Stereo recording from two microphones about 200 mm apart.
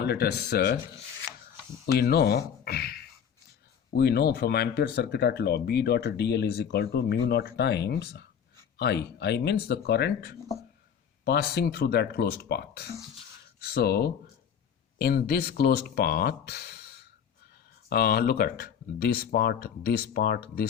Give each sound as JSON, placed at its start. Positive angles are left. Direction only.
{"t": 0.0, "sound": "speech", "side_deg": 55}
{"t": 1.9, "sound": "speech", "side_deg": 50}